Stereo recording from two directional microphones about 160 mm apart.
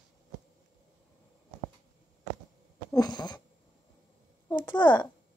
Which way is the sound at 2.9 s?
25° left (ahead or behind).